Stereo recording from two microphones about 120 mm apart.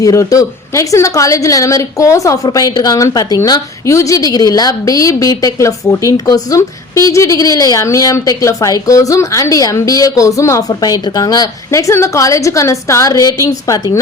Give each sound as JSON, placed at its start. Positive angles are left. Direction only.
{"t": 0.0, "sound": "a woman's voice", "side_deg": 30}